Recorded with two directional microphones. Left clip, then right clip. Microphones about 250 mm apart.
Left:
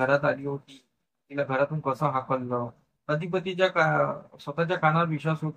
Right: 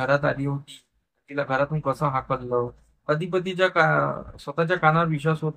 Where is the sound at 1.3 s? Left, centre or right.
Centre.